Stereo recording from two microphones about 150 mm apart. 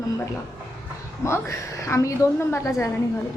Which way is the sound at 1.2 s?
20° left (ahead or behind).